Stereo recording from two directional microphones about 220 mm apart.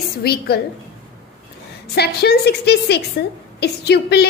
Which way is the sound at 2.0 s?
45° left (ahead or behind).